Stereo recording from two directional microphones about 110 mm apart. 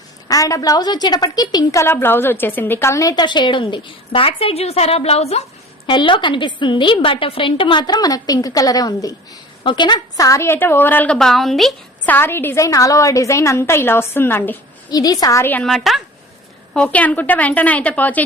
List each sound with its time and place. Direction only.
0.3 s a woman's voice: 30° left (ahead or behind); by 5.4 s 70° left (ahead or behind)
5.8 s a woman's voice: 50° left (ahead or behind); by 11.7 s centre (ahead or behind)
12.0 s a woman's voice: 20° left (ahead or behind)
14.8 s a woman's voice: 35° left (ahead or behind)
15.6 s a woman's voice: centre (ahead or behind)